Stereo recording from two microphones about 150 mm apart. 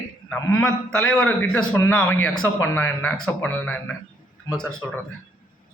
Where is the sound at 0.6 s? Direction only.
5° left (ahead or behind).